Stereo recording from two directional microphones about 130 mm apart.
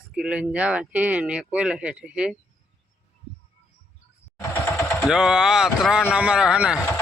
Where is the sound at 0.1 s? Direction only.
5° right (ahead or behind).